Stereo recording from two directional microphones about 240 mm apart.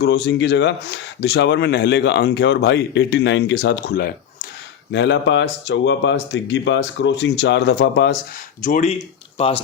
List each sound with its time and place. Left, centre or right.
0.0 s speech: left
8.6 s speech: left